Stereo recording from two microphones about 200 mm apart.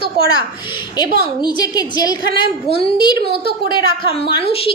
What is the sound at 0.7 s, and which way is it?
A woman's voice, 20° left (ahead or behind).